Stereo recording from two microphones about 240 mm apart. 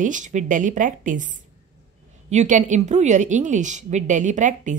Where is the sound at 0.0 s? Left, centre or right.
Right.